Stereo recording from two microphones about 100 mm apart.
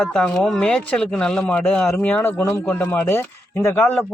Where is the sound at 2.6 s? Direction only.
15° left (ahead or behind).